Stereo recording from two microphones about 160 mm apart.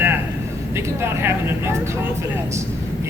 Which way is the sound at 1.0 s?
15° right (ahead or behind).